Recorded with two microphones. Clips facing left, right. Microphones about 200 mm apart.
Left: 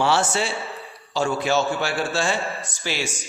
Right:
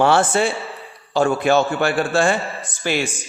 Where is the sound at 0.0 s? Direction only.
55° right (ahead or behind).